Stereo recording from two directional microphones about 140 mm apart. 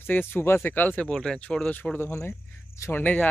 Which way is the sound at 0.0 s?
15° left (ahead or behind).